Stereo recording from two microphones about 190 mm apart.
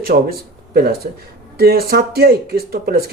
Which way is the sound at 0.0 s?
55° right (ahead or behind).